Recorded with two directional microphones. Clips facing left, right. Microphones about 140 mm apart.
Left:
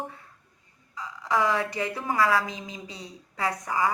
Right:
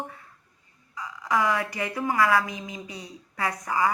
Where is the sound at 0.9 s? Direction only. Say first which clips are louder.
Even; 25° left (ahead or behind).